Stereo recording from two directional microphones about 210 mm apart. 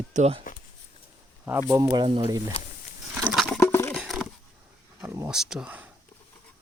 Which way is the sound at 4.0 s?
Centre (ahead or behind).